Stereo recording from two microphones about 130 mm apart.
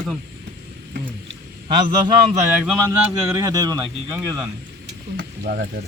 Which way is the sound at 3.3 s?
30° right (ahead or behind).